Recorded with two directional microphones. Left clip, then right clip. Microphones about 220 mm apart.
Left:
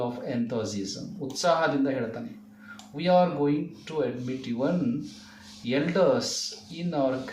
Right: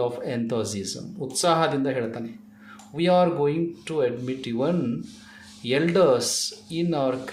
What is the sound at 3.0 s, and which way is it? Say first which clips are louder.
Speech: right 2 dB; 50° right (ahead or behind).